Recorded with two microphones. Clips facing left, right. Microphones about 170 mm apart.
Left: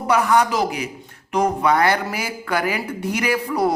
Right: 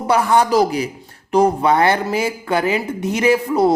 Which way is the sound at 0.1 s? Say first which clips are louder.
Right 3 dB; 30° right (ahead or behind).